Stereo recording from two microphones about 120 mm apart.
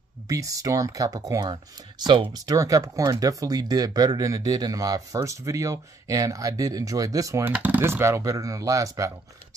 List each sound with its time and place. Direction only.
0.3 s speech: 30° right (ahead or behind)
2.4 s speech: 30° right (ahead or behind)
7.4 s speech: 15° right (ahead or behind)